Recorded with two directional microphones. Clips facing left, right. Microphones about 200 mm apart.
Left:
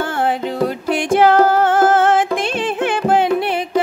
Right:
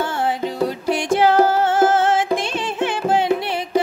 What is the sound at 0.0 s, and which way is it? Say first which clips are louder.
Music: left 2 dB; 55° left (ahead or behind).